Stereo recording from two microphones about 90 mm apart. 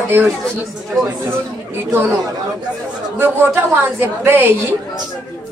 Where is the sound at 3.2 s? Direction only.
25° right (ahead or behind).